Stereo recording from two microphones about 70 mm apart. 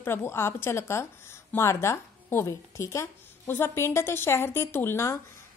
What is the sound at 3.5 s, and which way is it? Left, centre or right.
A woman's voice, left.